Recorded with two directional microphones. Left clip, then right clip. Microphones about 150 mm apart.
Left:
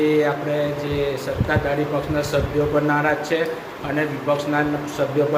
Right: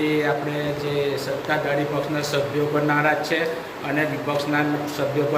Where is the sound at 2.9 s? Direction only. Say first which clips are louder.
Even; 20° left (ahead or behind).